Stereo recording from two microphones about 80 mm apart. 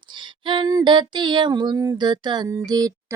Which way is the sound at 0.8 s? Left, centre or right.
Right.